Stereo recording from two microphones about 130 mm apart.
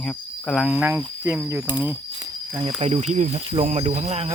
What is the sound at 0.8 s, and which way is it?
Speech, 15° right (ahead or behind).